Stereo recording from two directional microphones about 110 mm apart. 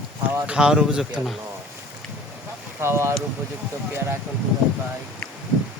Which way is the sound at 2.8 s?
25° right (ahead or behind).